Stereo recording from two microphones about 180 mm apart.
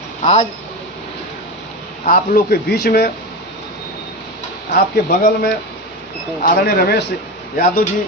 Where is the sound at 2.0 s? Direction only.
50° left (ahead or behind).